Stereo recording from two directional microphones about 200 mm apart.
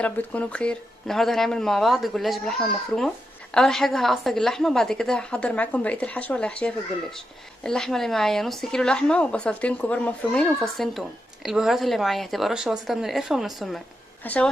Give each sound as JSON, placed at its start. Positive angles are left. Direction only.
{"t": 0.0, "sound": "a woman's voice", "side_deg": 5}
{"t": 3.5, "sound": "a woman's voice", "side_deg": 0}